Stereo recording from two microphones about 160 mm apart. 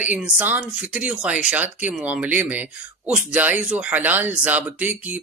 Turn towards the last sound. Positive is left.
turn(degrees=-10)  # may be behind; listen again after turning